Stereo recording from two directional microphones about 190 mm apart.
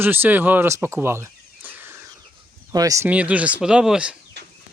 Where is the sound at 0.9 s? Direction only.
15° right (ahead or behind).